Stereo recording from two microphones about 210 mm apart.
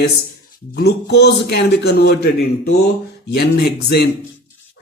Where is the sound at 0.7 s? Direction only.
50° left (ahead or behind).